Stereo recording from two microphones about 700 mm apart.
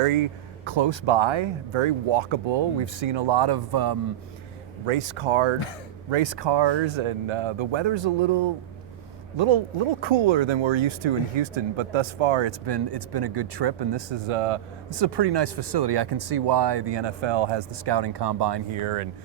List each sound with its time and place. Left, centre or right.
0.0 s speech: right
4.9 s speech: right